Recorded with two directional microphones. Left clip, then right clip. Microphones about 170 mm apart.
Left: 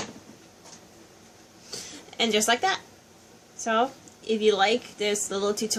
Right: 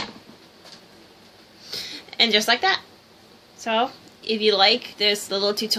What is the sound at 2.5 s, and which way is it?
A woman's voice, 20° left (ahead or behind).